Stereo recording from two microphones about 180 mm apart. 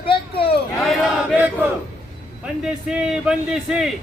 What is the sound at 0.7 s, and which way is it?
Chant, centre (ahead or behind).